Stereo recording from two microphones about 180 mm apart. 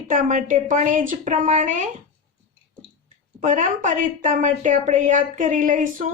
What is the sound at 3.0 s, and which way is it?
A woman's voice, 45° right (ahead or behind).